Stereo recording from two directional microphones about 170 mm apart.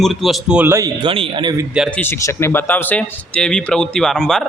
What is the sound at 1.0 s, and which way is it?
Speech, 30° right (ahead or behind).